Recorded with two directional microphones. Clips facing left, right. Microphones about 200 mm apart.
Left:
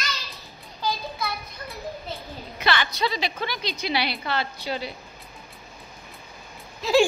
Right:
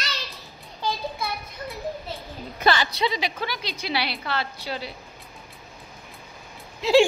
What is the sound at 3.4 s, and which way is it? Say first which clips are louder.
A woman's voice: left 1 dB; 5° right (ahead or behind).